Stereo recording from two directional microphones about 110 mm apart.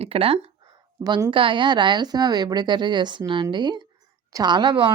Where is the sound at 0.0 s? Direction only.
60° right (ahead or behind).